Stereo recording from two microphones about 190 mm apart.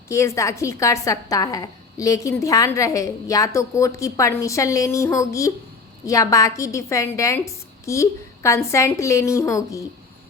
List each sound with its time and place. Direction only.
0.1 s a woman's voice: 15° left (ahead or behind)